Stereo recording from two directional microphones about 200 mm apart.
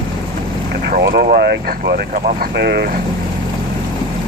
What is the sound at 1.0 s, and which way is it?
Speech, 50° right (ahead or behind).